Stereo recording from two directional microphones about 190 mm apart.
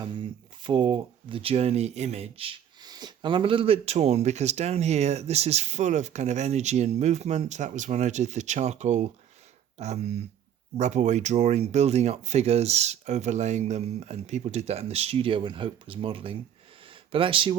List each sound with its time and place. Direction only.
0.0 s speech: 25° right (ahead or behind)